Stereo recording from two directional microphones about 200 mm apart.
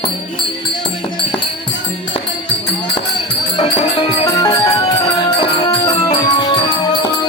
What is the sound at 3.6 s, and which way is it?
Music, 25° left (ahead or behind).